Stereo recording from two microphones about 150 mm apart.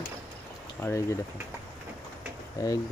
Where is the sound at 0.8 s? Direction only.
15° left (ahead or behind).